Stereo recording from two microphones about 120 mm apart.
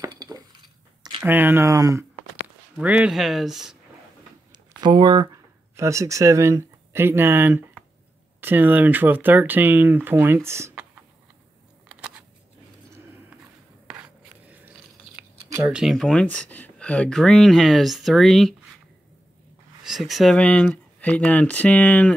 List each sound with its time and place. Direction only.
0.0 s dishes: 35° right (ahead or behind)
1.2 s speech: 20° right (ahead or behind)
2.8 s speech: 10° right (ahead or behind)
4.5 s speech: 40° right (ahead or behind); by 10.8 s 20° right (ahead or behind)
11.9 s a sound: 10° right (ahead or behind)
13.9 s a sound: 10° right (ahead or behind)
15.6 s speech: 5° right (ahead or behind)
19.8 s speech: centre (ahead or behind)
20.3 s speech: 10° left (ahead or behind)